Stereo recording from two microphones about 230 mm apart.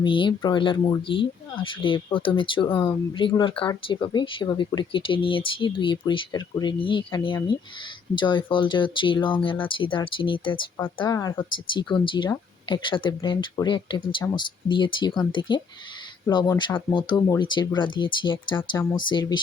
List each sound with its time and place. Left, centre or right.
0.0 s speech: left